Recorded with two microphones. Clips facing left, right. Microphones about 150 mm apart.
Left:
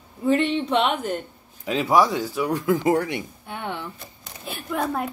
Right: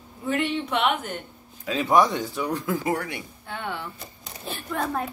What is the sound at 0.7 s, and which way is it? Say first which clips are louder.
Speech: left 1 dB; 30° left (ahead or behind).